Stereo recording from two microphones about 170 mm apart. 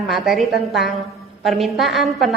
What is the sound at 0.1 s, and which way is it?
A woman's voice, centre (ahead or behind).